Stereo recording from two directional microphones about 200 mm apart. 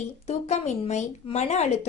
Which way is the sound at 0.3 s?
35° left (ahead or behind).